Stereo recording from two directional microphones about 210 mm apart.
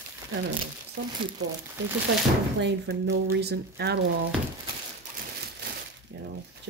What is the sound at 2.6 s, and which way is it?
Speech, 55° right (ahead or behind).